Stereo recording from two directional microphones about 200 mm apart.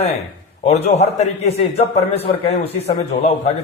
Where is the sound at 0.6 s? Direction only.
30° left (ahead or behind).